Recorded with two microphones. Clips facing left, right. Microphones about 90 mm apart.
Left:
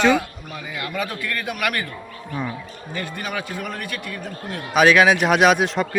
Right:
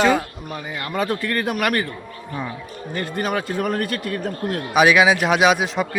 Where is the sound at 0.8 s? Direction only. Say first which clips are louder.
Right 4 dB; 35° right (ahead or behind).